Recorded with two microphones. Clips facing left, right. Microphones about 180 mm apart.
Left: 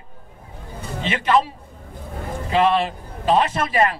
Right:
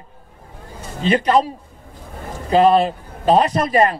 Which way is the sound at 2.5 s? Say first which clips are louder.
Right 5 dB; 40° right (ahead or behind).